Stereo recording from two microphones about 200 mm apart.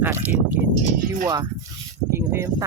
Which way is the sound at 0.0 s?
10° right (ahead or behind).